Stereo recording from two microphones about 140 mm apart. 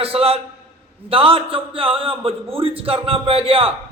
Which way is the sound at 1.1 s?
40° right (ahead or behind).